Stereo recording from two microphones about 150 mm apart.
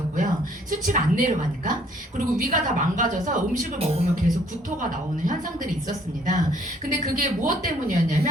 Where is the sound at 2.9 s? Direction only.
60° right (ahead or behind).